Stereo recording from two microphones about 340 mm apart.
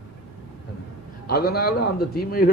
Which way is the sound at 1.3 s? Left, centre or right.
Left.